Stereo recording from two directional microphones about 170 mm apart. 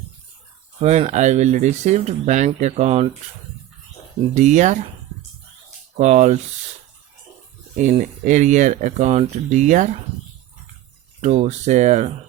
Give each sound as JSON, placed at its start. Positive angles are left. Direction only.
{"t": 0.8, "sound": "speech", "side_deg": -40}
{"t": 4.4, "sound": "speech", "side_deg": -45}
{"t": 6.0, "sound": "speech", "side_deg": -40}
{"t": 7.8, "sound": "speech", "side_deg": -45}
{"t": 11.2, "sound": "speech", "side_deg": -40}